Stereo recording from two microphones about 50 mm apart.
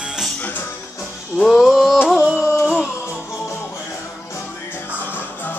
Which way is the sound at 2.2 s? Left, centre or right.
Centre.